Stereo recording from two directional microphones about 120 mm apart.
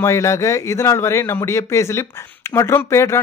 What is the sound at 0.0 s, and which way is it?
Speech, 25° left (ahead or behind).